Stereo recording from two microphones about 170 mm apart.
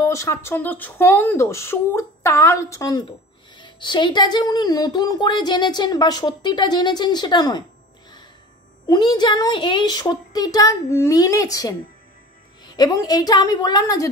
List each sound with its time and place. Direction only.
0.0 s speech: 15° left (ahead or behind)
8.8 s speech: 25° left (ahead or behind)